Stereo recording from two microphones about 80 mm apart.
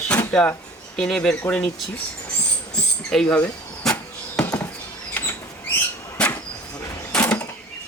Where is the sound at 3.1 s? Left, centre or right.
Centre.